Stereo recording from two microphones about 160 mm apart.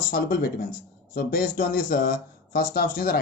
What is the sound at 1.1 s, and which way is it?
Speech, 65° left (ahead or behind).